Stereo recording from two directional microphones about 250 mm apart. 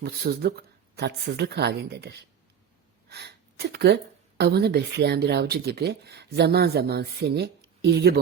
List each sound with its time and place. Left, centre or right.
0.0 s speech: right